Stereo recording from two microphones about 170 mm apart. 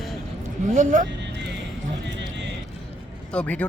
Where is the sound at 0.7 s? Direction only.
50° right (ahead or behind).